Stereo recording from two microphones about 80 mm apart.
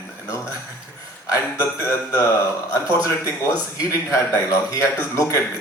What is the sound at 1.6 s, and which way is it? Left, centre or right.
Speech, left.